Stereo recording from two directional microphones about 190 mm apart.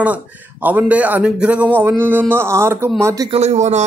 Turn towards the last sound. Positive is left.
turn(degrees=-35)  # may be behind; listen again after turning